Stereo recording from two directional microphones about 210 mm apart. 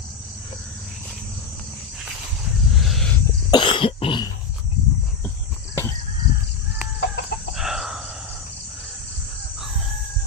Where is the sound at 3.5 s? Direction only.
25° left (ahead or behind).